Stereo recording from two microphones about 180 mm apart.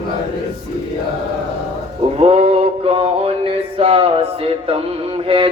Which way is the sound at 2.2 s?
30° right (ahead or behind).